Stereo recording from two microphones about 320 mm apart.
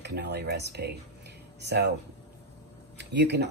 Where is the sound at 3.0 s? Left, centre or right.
Right.